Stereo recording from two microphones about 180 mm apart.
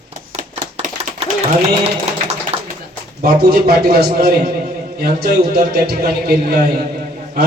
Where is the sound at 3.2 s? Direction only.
60° right (ahead or behind).